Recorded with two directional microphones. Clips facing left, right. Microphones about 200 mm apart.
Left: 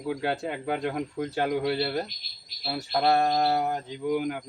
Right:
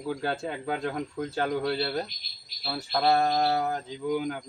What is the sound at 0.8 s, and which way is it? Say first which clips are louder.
Speech: left 2 dB; 20° left (ahead or behind).